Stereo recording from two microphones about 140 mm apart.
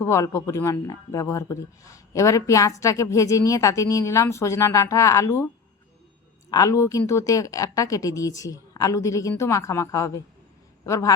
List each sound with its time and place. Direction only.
0.0 s speech: 20° left (ahead or behind)
6.5 s a man's voice: 25° left (ahead or behind)